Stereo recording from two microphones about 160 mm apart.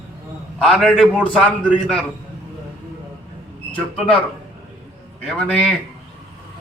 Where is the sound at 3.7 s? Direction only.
10° left (ahead or behind).